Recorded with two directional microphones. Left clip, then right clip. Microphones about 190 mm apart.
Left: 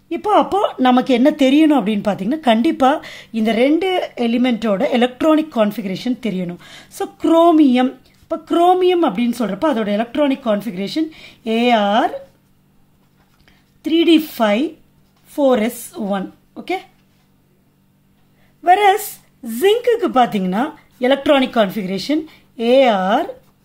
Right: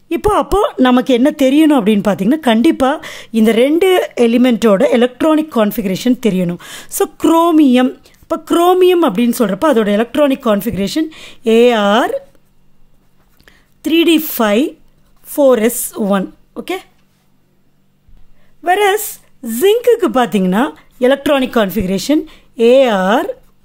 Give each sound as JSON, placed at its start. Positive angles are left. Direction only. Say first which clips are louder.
{"t": 0.1, "sound": "a woman's voice", "louder": "right 2 dB", "side_deg": -50}
{"t": 13.5, "sound": "speech", "louder": "right 3 dB", "side_deg": -45}
{"t": 18.6, "sound": "a woman's voice", "louder": "even", "side_deg": -30}